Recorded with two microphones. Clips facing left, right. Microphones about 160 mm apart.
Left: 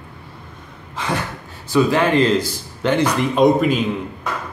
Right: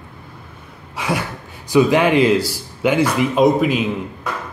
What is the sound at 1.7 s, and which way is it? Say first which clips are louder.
Speech: right 2 dB; 15° right (ahead or behind).